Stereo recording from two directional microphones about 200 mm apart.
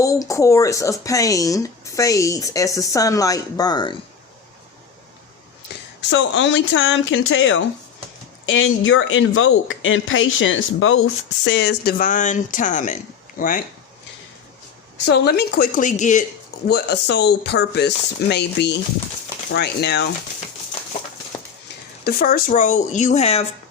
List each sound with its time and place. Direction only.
0.0 s speech: 15° left (ahead or behind)
6.0 s speech: 65° left (ahead or behind); by 13.7 s 45° left (ahead or behind)
15.0 s a woman's voice: 55° left (ahead or behind); by 16.2 s 40° left (ahead or behind)
16.6 s speech: 55° left (ahead or behind)
22.0 s speech: 45° left (ahead or behind); by 23.5 s 30° left (ahead or behind)